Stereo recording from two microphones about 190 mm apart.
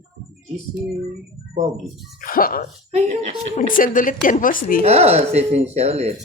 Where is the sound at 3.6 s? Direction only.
45° left (ahead or behind).